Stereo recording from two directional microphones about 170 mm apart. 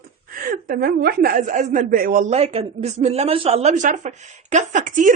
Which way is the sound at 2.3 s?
35° right (ahead or behind).